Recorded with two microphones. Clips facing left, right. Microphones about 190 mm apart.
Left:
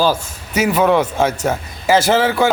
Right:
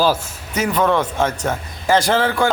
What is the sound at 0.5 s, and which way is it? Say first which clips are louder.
A man's voice: left 3 dB; 10° left (ahead or behind).